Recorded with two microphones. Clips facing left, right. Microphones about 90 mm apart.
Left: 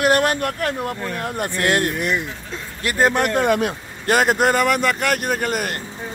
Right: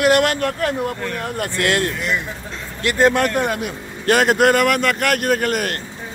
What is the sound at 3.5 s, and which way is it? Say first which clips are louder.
Speech: left 5 dB; 50° left (ahead or behind).